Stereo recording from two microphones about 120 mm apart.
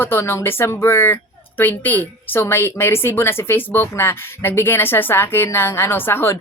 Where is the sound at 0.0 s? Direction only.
20° left (ahead or behind).